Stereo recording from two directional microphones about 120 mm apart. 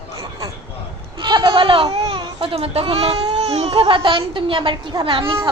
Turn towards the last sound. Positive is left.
turn(degrees=-45)  # may be behind; listen again after turning